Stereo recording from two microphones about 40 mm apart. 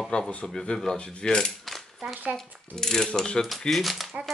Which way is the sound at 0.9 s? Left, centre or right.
Left.